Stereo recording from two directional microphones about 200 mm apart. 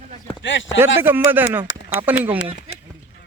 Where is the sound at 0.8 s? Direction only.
10° right (ahead or behind).